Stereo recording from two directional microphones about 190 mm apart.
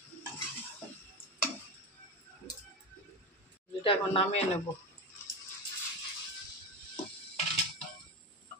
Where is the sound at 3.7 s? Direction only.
30° left (ahead or behind).